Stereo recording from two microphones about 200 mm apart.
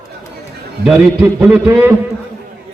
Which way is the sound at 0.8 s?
5° right (ahead or behind).